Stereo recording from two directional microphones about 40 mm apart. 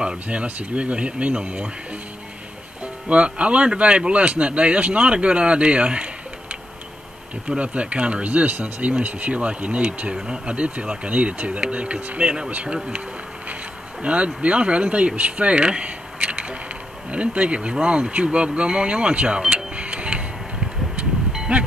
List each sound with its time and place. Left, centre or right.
0.0 s speech: right
2.8 s speech: right
7.4 s speech: right
10.1 s speech: right
14.0 s speech: right
19.5 s music: right
21.5 s speech: right